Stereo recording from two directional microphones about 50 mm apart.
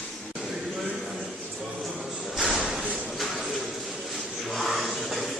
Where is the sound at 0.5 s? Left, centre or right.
Centre.